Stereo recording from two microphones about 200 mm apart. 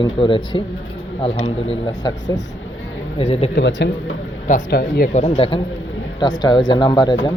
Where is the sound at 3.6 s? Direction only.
60° left (ahead or behind).